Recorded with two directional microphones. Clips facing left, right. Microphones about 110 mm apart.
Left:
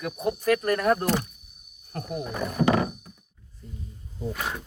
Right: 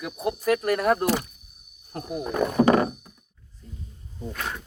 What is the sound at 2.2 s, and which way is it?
Speech, 60° right (ahead or behind).